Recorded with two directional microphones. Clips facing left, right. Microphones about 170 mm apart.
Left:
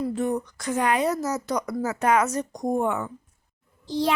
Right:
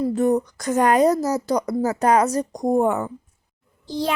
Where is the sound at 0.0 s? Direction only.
40° right (ahead or behind).